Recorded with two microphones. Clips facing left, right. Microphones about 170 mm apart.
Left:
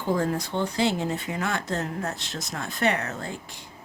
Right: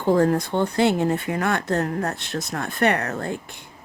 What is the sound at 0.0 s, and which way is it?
Speech, 60° right (ahead or behind).